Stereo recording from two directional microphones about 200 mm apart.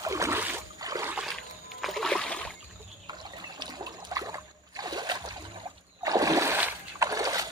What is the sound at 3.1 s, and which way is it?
Trickle, 20° right (ahead or behind).